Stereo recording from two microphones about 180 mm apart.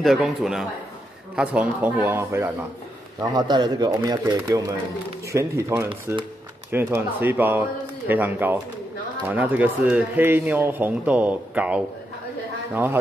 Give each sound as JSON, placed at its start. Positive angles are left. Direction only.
{"t": 0.0, "sound": "a man's voice", "side_deg": 0}